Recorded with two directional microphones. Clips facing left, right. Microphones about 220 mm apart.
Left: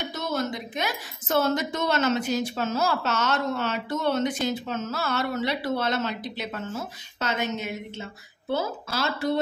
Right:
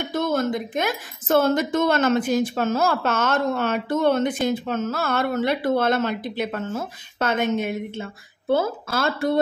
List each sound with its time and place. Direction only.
0.0 s a woman's voice: 50° right (ahead or behind)